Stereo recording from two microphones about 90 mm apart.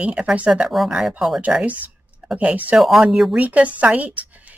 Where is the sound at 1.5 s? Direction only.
15° right (ahead or behind).